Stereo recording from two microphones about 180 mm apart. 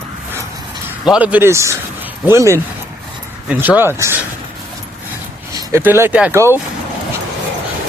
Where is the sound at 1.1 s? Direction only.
5° right (ahead or behind).